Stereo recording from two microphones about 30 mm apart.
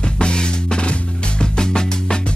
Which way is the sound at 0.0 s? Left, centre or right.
Left.